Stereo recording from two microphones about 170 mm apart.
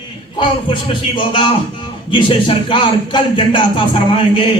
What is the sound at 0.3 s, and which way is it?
Speech, 30° left (ahead or behind).